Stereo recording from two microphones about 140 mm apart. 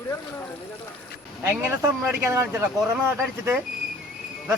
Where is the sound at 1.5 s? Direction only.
15° right (ahead or behind).